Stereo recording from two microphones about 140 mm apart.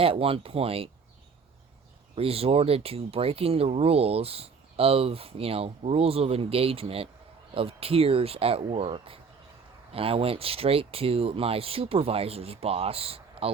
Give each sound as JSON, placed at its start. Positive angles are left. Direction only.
{"t": 0.0, "sound": "speech", "side_deg": -40}
{"t": 2.1, "sound": "speech", "side_deg": -45}